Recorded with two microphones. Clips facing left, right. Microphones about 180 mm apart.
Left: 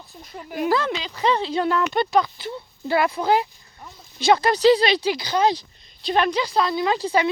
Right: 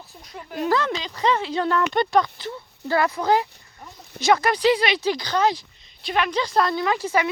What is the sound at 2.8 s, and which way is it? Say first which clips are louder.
Speech: left 1 dB; 20° left (ahead or behind).